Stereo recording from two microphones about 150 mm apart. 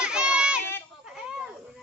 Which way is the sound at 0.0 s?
5° right (ahead or behind).